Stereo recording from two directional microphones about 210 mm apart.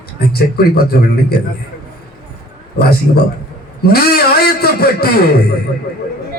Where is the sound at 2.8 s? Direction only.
50° left (ahead or behind).